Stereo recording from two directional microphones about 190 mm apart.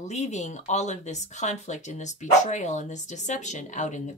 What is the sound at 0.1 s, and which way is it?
Speech, 35° left (ahead or behind).